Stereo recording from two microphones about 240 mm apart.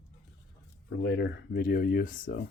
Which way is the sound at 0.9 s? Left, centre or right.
Left.